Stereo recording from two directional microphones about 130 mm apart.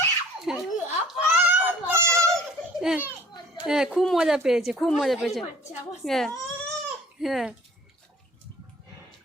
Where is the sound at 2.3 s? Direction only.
5° right (ahead or behind).